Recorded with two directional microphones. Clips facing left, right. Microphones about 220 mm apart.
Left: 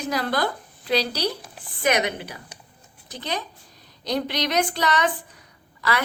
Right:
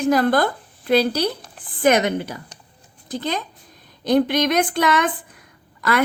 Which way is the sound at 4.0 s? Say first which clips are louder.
Right 8 dB; 50° right (ahead or behind).